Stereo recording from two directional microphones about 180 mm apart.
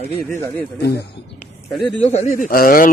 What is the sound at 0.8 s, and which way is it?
Speech, 65° left (ahead or behind).